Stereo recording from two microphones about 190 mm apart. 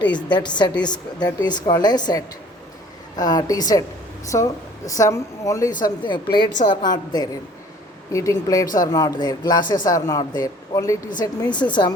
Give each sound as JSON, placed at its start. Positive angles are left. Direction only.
{"t": 0.2, "sound": "a woman's voice", "side_deg": 25}